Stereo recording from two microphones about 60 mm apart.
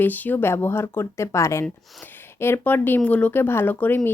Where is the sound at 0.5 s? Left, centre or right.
Left.